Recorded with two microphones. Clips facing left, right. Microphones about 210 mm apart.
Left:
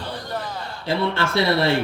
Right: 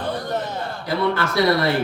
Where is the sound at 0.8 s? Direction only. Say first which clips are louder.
Right 1 dB; 25° left (ahead or behind).